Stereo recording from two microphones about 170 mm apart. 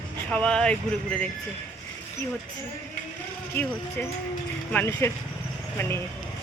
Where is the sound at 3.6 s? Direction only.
15° left (ahead or behind).